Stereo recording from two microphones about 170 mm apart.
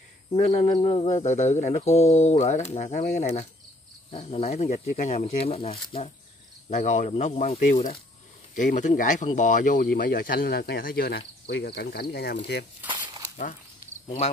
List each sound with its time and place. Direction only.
0.3 s speech: 40° left (ahead or behind)
8.5 s speech: 50° left (ahead or behind); by 12.4 s 70° left (ahead or behind)
14.0 s speech: 35° left (ahead or behind)